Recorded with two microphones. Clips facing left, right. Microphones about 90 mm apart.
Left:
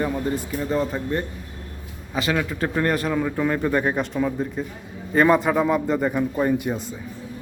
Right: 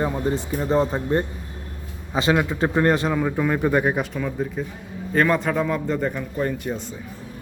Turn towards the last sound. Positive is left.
turn(degrees=10)  # may be behind; listen again after turning